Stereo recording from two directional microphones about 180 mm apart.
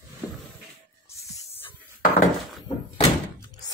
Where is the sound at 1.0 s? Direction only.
15° left (ahead or behind).